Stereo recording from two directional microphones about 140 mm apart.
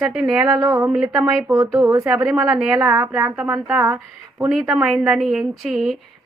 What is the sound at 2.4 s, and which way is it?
Speech, 20° right (ahead or behind).